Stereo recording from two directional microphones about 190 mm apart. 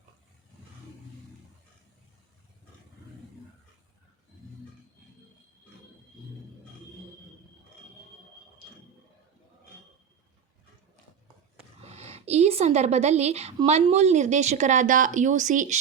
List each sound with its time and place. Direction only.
11.9 s speech: 35° right (ahead or behind)